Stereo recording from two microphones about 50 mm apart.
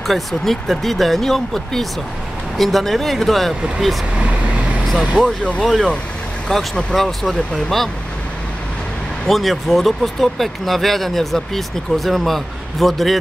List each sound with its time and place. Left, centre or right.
0.0 s speech: centre
5.2 s speech: centre
5.6 s speech: centre
9.3 s speech: centre